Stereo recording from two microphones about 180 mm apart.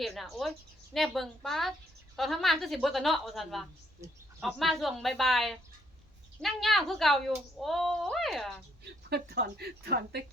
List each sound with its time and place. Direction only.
0.0 s speech: centre (ahead or behind)
8.8 s speech: 65° right (ahead or behind)